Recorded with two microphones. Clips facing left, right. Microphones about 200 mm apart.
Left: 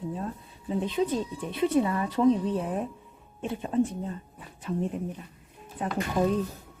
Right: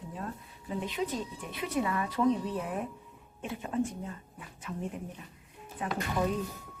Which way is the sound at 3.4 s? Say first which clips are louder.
Left 6 dB; 30° left (ahead or behind).